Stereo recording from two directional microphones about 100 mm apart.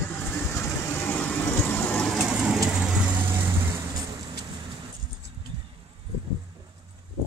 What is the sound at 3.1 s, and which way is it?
Vehicle, 20° right (ahead or behind).